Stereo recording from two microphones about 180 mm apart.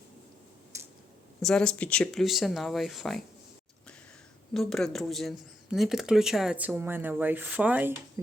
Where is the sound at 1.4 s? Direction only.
5° left (ahead or behind).